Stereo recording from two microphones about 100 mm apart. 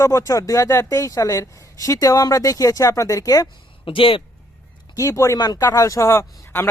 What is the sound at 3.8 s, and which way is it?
Speech, 60° left (ahead or behind).